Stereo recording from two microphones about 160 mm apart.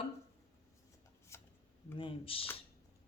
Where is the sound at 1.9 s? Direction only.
35° left (ahead or behind).